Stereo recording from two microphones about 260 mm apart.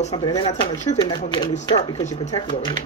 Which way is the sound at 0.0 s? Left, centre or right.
Centre.